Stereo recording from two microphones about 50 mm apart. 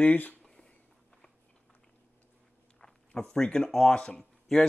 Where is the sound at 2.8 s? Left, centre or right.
Centre.